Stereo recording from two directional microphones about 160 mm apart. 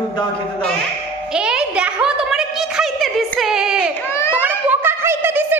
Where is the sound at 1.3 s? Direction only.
5° right (ahead or behind).